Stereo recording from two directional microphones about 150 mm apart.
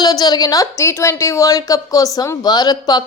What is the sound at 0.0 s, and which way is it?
Speech, 25° left (ahead or behind).